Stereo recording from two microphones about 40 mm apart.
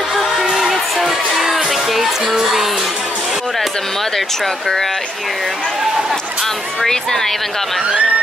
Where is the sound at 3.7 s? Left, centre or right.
Centre.